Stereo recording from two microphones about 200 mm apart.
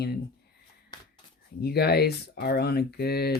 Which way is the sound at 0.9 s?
20° left (ahead or behind).